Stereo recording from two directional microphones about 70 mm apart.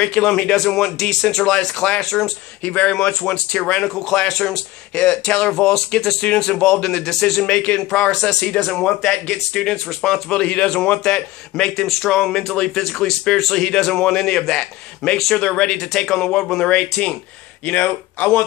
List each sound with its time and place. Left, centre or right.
0.0 s speech: centre
2.6 s speech: centre
17.6 s speech: left